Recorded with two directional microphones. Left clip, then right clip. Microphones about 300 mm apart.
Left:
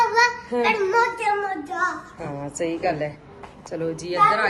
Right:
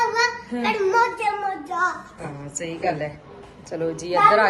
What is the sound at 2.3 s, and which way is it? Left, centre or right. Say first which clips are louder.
Speech: left 6 dB; left.